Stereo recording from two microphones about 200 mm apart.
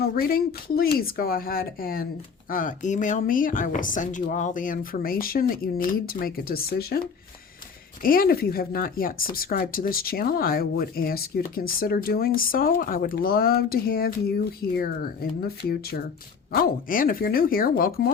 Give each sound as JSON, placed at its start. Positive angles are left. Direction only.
{"t": 0.0, "sound": "speech", "side_deg": 50}
{"t": 8.0, "sound": "speech", "side_deg": 45}